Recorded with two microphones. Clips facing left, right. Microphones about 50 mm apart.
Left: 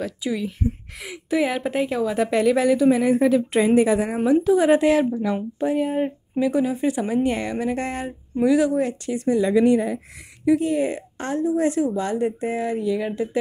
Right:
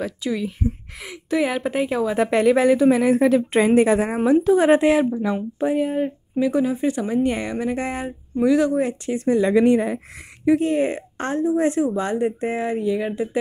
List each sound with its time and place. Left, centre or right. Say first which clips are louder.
0.2 s speech: right 1 dB; centre
1.0 s speech: even; centre
1.9 s speech: right 1 dB; centre
2.1 s a woman's voice: right 2 dB; right
2.9 s speech: right 1 dB; right
3.3 s a woman's voice: right 1 dB; right
5.6 s speech: right 2 dB; centre
5.9 s speech: right 1 dB; centre
6.4 s speech: right 1 dB; centre
8.7 s speech: right 1 dB; right
9.1 s a woman's voice: right 2 dB; right; by 13.4 s centre